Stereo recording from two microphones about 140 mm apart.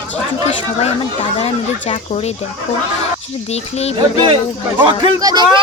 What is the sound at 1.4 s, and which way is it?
Speech, 45° left (ahead or behind).